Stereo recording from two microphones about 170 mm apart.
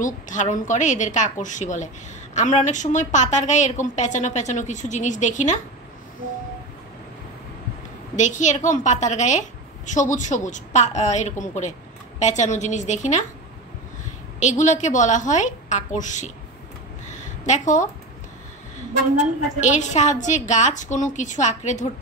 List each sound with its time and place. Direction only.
0.0 s a woman's voice: 45° left (ahead or behind)
8.2 s a woman's voice: 45° left (ahead or behind)
14.4 s a woman's voice: 45° left (ahead or behind)
17.1 s a sound: 45° left (ahead or behind)
19.6 s a woman's voice: 45° left (ahead or behind)